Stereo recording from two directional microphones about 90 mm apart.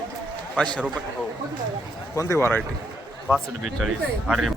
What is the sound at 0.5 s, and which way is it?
Speech, 10° left (ahead or behind).